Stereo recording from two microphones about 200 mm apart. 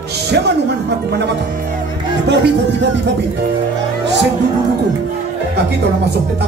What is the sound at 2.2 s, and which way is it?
Music, 55° right (ahead or behind).